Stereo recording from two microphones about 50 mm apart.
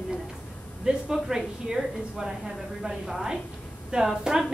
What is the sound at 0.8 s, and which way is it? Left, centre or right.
Speech, centre.